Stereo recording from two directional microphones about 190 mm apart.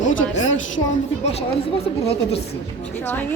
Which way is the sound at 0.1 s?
90° left.